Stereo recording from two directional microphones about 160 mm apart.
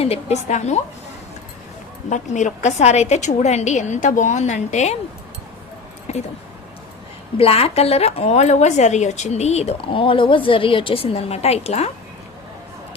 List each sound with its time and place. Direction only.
0.0 s a woman's voice: 40° left (ahead or behind)
2.0 s a woman's voice: 50° left (ahead or behind)
6.1 s speech: 45° left (ahead or behind)
7.3 s a woman's voice: 35° left (ahead or behind)